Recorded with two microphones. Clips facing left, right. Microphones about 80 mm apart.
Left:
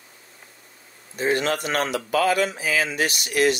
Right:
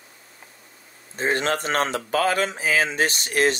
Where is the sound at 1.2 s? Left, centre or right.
Right.